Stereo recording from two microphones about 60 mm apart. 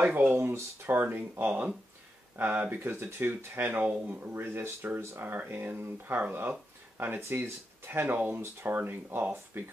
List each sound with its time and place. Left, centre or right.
0.0 s speech: right
2.8 s speech: right
5.3 s speech: right